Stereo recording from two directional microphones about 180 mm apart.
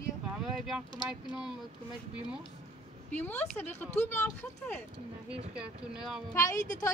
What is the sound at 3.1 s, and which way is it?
Speech, 10° left (ahead or behind).